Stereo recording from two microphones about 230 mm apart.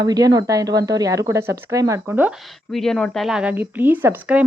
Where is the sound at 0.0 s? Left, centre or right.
Centre.